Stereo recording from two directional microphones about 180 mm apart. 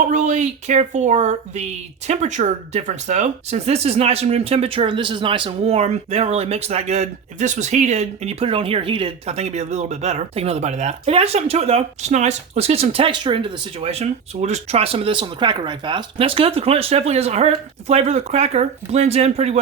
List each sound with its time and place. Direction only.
0.1 s speech: 45° right (ahead or behind)